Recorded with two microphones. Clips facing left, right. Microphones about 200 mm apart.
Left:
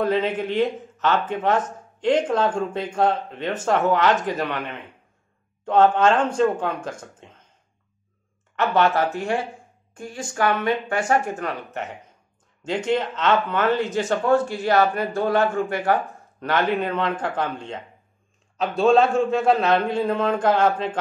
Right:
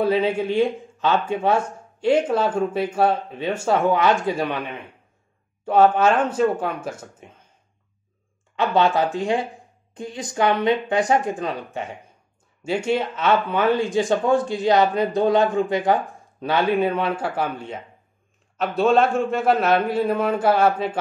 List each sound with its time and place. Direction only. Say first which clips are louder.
0.0 s speech: right 2 dB; 10° right (ahead or behind)
8.5 s a man's voice: right 1 dB; 15° right (ahead or behind)